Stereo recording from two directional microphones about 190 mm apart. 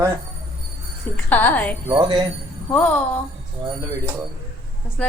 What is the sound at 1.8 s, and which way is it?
Speech, 25° right (ahead or behind).